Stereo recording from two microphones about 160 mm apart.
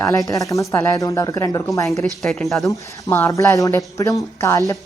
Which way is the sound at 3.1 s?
15° left (ahead or behind).